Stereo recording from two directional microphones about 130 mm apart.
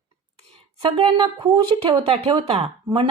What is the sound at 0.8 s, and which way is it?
Speech, 45° right (ahead or behind).